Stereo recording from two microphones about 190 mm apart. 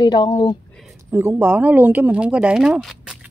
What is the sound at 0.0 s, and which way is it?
Speech, 20° left (ahead or behind).